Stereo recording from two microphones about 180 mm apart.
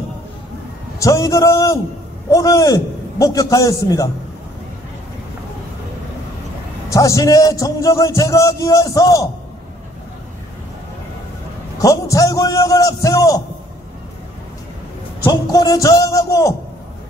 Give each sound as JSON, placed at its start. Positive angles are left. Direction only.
{"t": 0.9, "sound": "a man's voice", "side_deg": 15}
{"t": 6.9, "sound": "a man's voice", "side_deg": 20}
{"t": 11.8, "sound": "a man's voice", "side_deg": 20}
{"t": 15.2, "sound": "a man's voice", "side_deg": 20}